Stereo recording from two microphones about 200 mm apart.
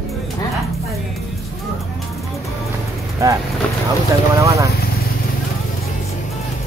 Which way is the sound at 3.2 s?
15° right (ahead or behind).